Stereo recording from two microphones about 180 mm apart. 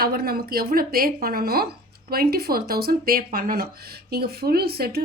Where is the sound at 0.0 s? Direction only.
60° right (ahead or behind).